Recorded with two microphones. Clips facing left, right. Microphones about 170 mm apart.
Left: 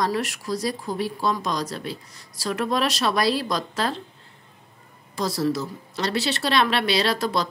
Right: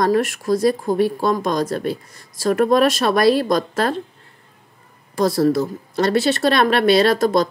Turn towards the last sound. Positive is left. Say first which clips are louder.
# right 8 dB
turn(degrees=-50)  # may be behind; listen again after turning